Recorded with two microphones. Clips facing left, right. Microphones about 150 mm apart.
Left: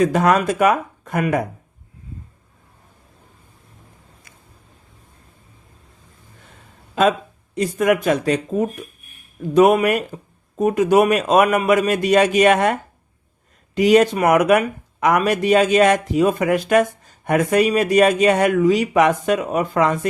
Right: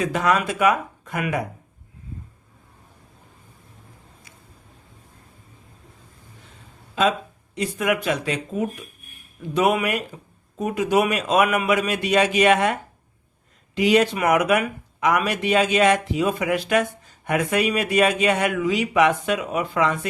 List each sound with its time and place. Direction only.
0.0 s a man's voice: 45° left (ahead or behind)
7.5 s a man's voice: 45° left (ahead or behind)